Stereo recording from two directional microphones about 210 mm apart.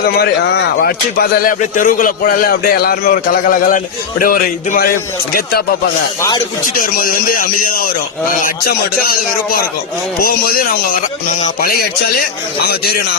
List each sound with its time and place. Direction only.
0.2 s speech: 50° left (ahead or behind)
6.7 s speech: 40° left (ahead or behind)